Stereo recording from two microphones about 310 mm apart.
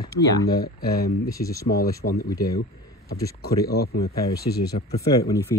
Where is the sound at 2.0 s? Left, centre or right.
Left.